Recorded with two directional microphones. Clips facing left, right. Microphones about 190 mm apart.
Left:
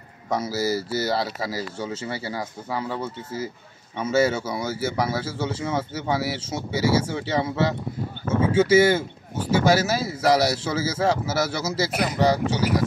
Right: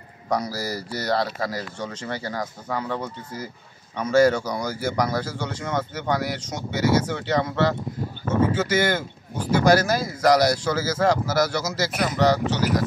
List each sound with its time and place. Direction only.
0.3 s speech: 5° left (ahead or behind)